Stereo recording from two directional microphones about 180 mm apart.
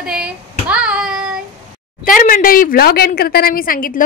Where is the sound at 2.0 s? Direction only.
50° left (ahead or behind).